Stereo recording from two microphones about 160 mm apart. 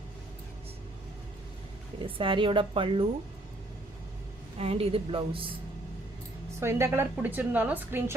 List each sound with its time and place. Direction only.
2.0 s speech: 35° right (ahead or behind)
4.5 s speech: 40° right (ahead or behind)
6.6 s a woman's voice: 15° right (ahead or behind)